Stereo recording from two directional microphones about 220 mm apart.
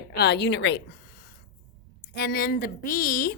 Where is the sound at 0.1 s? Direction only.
50° left (ahead or behind).